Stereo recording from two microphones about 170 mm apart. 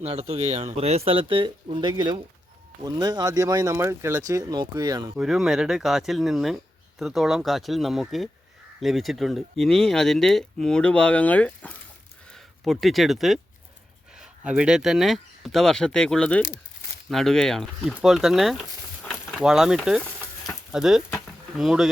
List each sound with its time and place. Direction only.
0.0 s speech: 35° right (ahead or behind); by 5.1 s 20° right (ahead or behind)
5.1 s speech: 5° right (ahead or behind)
19.0 s a sound: centre (ahead or behind)
21.5 s speech: centre (ahead or behind)